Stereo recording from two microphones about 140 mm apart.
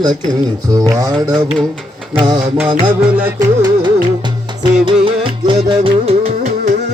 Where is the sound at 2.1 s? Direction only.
30° right (ahead or behind).